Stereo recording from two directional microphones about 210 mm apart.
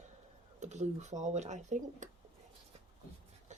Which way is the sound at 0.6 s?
35° right (ahead or behind).